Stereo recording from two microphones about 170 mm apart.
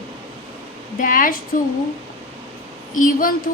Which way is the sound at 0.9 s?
50° left (ahead or behind).